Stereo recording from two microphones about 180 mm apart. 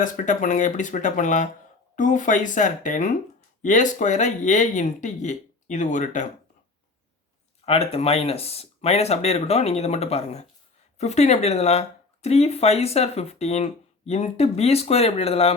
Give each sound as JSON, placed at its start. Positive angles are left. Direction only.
{"t": 0.0, "sound": "speech", "side_deg": 45}
{"t": 7.6, "sound": "speech", "side_deg": 35}